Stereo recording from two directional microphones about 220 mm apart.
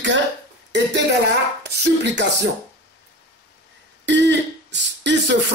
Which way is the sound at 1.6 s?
50° right (ahead or behind).